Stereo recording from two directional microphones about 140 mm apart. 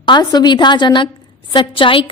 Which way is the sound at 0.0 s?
30° left (ahead or behind).